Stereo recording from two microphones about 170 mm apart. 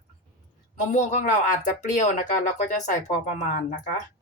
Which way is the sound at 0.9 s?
45° left (ahead or behind).